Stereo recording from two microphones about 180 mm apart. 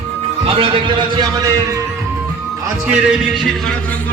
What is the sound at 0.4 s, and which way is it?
A man's voice, 30° right (ahead or behind).